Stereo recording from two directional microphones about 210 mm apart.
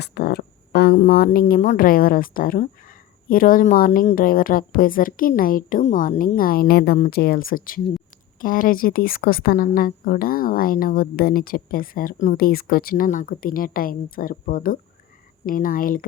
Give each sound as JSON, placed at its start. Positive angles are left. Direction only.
{"t": 0.0, "sound": "speech", "side_deg": 50}